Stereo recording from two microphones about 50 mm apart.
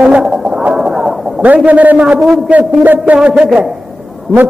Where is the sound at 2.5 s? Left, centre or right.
Right.